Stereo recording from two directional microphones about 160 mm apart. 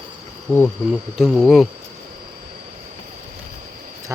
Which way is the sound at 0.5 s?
10° left (ahead or behind).